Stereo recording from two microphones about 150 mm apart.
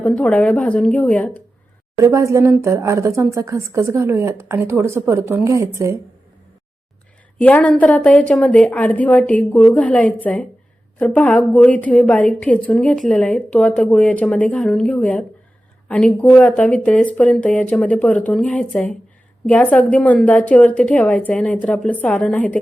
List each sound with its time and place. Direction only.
0.0 s a woman's voice: 5° left (ahead or behind)
2.0 s a woman's voice: 20° right (ahead or behind)
7.3 s a woman's voice: 10° left (ahead or behind)